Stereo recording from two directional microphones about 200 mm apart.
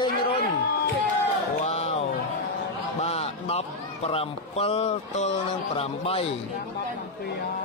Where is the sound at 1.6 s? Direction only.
30° left (ahead or behind).